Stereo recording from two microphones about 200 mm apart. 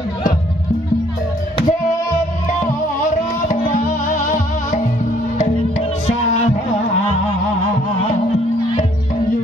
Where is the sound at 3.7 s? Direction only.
40° left (ahead or behind).